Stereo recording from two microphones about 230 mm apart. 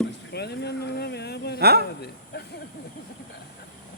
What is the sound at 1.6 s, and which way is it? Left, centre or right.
Speech, right.